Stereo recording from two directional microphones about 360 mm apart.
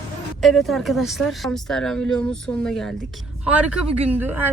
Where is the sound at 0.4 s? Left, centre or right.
Centre.